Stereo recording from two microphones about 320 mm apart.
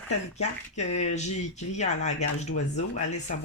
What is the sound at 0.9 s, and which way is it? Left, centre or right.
Speech, left.